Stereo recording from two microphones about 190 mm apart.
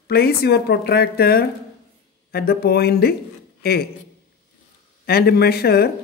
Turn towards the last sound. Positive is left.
turn(degrees=55)  # may be behind; listen again after turning